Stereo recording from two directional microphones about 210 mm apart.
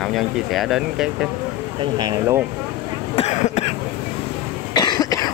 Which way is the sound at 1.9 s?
20° right (ahead or behind).